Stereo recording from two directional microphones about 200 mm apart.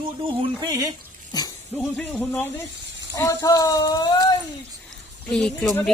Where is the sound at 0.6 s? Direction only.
20° right (ahead or behind).